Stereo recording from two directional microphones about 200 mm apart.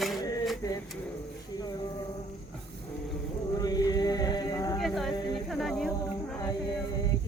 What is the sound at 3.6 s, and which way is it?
Chant, 20° left (ahead or behind).